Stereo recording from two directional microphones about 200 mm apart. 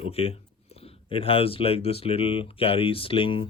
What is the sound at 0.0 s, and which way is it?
Speech, 30° left (ahead or behind).